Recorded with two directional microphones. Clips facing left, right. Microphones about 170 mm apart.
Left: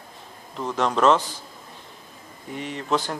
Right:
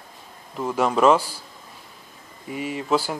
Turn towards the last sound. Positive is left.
turn(degrees=-5)  # may be behind; listen again after turning